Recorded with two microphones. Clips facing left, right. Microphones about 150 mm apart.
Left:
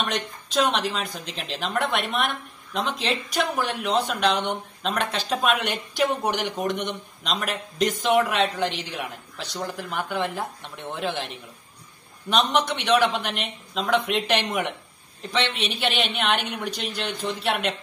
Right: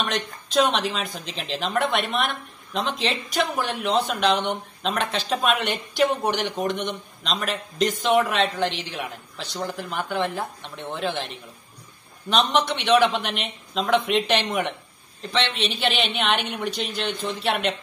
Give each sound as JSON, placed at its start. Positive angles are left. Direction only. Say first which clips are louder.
{"t": 0.0, "sound": "speech", "louder": "right 1 dB", "side_deg": 0}
{"t": 12.3, "sound": "speech", "louder": "right 1 dB", "side_deg": 5}